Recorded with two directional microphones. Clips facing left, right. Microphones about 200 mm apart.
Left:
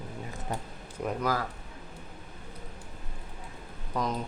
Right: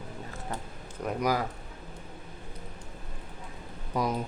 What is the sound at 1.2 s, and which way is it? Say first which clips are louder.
Speech: right 3 dB; 15° right (ahead or behind).